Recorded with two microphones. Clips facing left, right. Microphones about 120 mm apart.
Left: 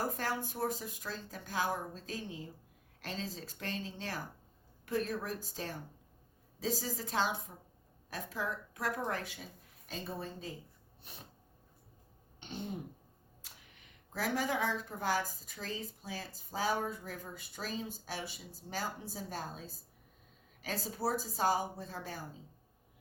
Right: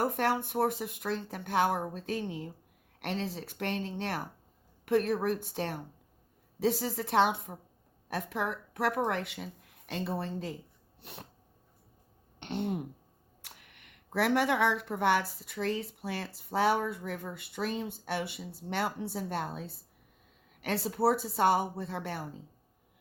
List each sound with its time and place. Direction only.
0.0 s speech: 65° right (ahead or behind)
11.0 s a sound: 70° right (ahead or behind)
12.4 s throat clearing: 70° right (ahead or behind)
13.4 s speech: 70° right (ahead or behind)